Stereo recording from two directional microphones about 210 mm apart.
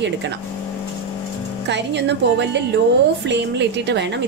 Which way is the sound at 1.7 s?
55° right (ahead or behind).